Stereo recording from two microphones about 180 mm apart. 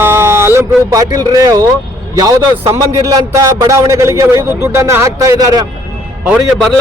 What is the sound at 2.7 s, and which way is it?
Speech, 20° right (ahead or behind).